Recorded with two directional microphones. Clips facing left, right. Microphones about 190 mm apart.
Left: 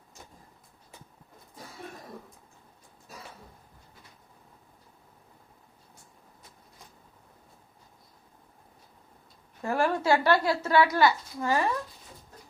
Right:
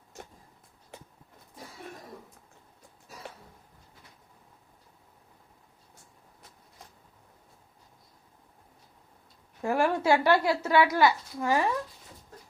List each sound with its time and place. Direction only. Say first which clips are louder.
9.6 s a woman's voice: right 1 dB; 15° right (ahead or behind)